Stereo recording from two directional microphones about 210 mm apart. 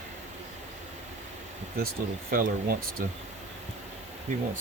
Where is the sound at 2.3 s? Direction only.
45° right (ahead or behind).